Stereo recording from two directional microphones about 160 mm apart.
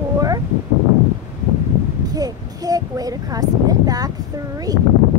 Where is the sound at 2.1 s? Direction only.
25° right (ahead or behind).